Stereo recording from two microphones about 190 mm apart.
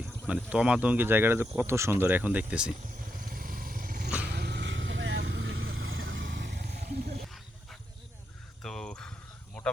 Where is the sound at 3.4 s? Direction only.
50° right (ahead or behind).